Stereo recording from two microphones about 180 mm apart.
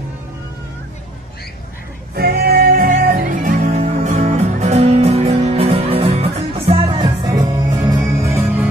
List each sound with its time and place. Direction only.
2.1 s music: 60° right (ahead or behind); by 8.6 s 15° right (ahead or behind)